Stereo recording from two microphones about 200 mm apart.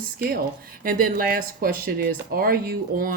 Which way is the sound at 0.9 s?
45° right (ahead or behind).